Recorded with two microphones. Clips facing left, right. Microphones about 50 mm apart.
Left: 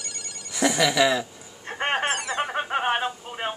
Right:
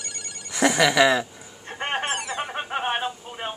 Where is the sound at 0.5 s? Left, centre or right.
Right.